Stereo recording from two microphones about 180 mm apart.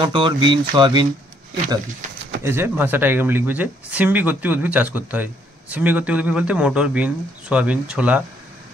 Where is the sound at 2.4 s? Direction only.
15° right (ahead or behind).